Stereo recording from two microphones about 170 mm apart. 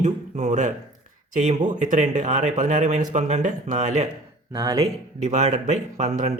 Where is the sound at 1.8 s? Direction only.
45° right (ahead or behind).